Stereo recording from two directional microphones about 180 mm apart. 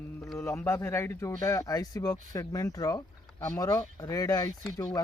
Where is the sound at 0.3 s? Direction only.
15° left (ahead or behind).